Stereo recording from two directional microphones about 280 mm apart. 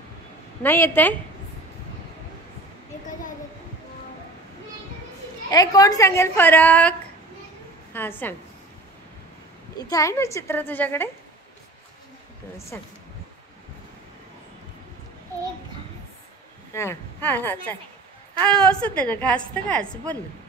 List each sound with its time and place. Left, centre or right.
0.6 s a woman's voice: centre
5.5 s a woman's voice: centre
9.8 s a woman's voice: centre
12.5 s a woman's voice: centre
16.7 s a woman's voice: centre